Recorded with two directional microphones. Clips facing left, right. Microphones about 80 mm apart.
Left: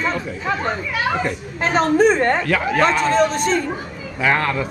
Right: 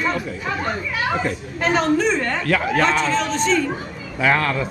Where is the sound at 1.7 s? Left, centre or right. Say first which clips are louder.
Left 4 dB; left.